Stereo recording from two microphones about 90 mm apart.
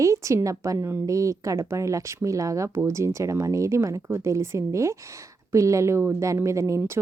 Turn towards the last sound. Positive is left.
turn(degrees=-35)  # may be behind; listen again after turning